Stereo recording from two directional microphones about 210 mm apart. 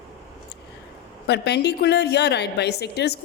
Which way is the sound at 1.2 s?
50° left (ahead or behind).